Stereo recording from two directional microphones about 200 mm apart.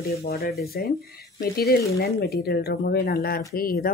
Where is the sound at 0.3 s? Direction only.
50° left (ahead or behind).